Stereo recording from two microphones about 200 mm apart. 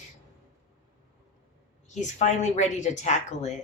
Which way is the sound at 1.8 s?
35° left (ahead or behind).